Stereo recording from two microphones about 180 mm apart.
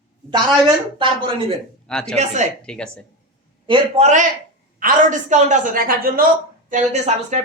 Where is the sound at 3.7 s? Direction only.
35° right (ahead or behind); by 6.2 s 50° right (ahead or behind).